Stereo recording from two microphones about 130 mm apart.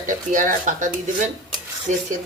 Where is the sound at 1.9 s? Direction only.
65° right (ahead or behind).